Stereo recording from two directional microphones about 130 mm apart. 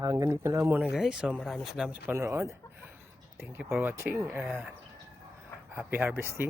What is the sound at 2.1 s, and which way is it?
Speech, 20° right (ahead or behind).